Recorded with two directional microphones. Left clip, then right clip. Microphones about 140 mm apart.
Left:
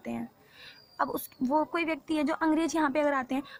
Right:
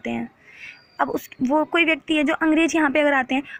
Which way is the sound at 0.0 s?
30° right (ahead or behind).